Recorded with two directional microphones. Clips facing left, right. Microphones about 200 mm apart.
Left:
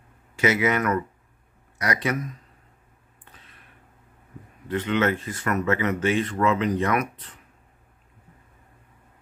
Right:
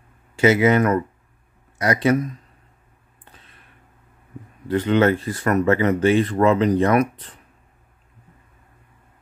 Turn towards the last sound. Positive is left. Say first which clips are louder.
# right 7 dB
turn(degrees=-35)  # may be behind; listen again after turning